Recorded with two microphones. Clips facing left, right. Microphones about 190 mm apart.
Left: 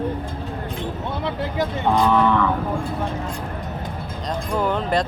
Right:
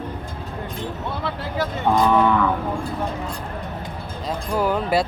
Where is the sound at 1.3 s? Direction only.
20° left (ahead or behind).